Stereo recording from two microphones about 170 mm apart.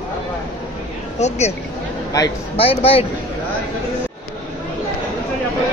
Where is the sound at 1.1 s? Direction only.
40° left (ahead or behind).